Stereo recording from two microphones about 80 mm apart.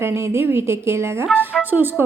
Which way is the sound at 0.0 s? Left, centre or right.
Right.